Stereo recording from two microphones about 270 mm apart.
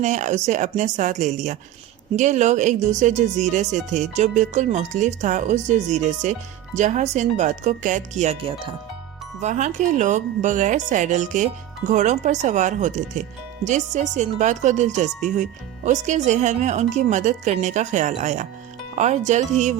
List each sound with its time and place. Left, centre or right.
0.0 s speech: right